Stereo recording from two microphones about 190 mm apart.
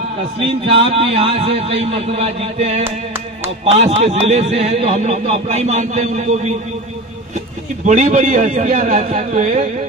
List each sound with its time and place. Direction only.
0.3 s a man's voice: 30° right (ahead or behind)
2.8 s clapping: 10° right (ahead or behind)
3.6 s a man's voice: 35° right (ahead or behind)
7.9 s a man's voice: 40° right (ahead or behind)